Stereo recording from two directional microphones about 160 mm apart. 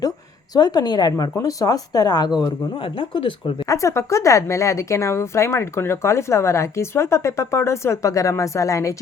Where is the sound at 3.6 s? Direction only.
20° left (ahead or behind).